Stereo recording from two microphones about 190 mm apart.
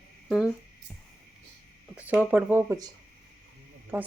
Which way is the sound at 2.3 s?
10° right (ahead or behind).